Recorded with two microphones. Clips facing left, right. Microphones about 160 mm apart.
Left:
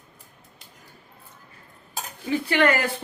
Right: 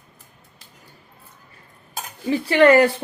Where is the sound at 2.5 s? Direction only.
35° right (ahead or behind).